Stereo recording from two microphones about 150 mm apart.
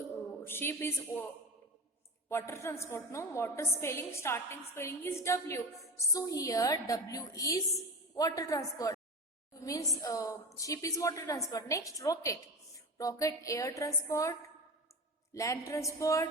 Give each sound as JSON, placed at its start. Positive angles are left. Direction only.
{"t": 0.4, "sound": "a woman's voice", "side_deg": 15}
{"t": 2.3, "sound": "a woman's voice", "side_deg": 15}